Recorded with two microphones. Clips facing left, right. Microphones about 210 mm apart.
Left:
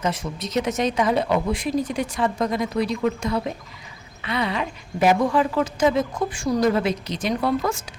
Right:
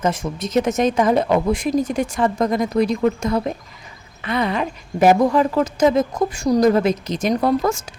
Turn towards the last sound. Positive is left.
turn(degrees=-45)  # may be behind; listen again after turning